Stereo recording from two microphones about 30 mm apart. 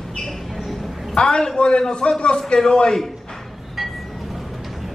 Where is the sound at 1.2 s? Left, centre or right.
Left.